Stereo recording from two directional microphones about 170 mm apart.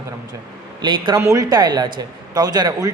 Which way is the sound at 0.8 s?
25° right (ahead or behind).